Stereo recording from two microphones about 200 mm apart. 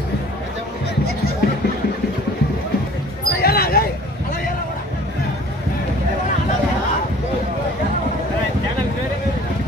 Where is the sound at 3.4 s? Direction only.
50° left (ahead or behind).